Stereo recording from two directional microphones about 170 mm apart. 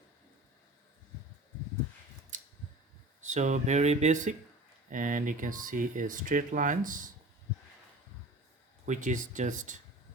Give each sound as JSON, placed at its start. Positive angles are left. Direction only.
{"t": 2.3, "sound": "a sound", "side_deg": -45}
{"t": 3.2, "sound": "speech", "side_deg": -45}
{"t": 8.9, "sound": "speech", "side_deg": -50}